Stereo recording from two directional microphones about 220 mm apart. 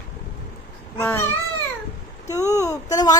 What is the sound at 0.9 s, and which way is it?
Speech, 10° left (ahead or behind).